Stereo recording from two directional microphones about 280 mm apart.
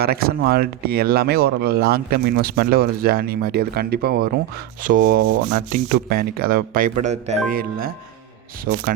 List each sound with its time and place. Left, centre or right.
0.0 s speech: right
4.8 s rub: right
5.6 s speech: right